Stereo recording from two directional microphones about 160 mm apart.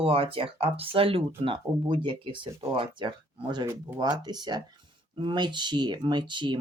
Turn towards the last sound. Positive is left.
turn(degrees=-30)  # may be behind; listen again after turning